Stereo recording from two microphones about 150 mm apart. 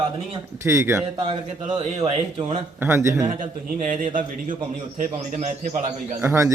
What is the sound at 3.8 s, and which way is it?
Speech, 60° right (ahead or behind).